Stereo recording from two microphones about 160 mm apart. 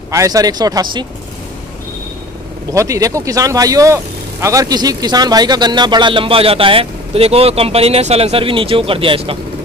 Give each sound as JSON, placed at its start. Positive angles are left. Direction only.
{"t": 0.1, "sound": "speech", "side_deg": -20}
{"t": 2.7, "sound": "speech", "side_deg": -20}